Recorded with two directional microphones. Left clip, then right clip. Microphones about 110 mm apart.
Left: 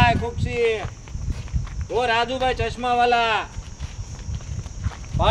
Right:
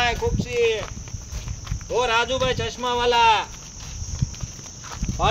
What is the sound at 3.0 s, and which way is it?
Speech, 35° left (ahead or behind).